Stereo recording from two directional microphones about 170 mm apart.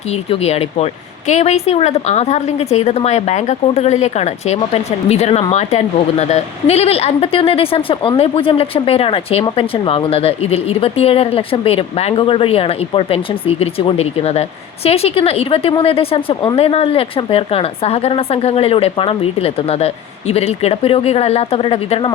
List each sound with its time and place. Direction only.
0.1 s a woman's voice: 40° left (ahead or behind)